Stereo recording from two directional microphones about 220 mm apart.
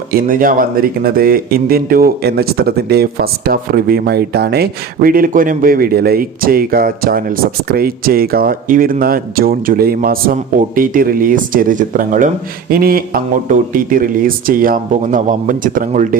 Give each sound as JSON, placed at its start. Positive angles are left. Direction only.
{"t": 0.1, "sound": "speech", "side_deg": -40}